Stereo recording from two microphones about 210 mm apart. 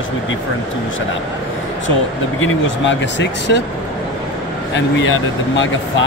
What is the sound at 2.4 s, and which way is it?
Speech, 65° left (ahead or behind).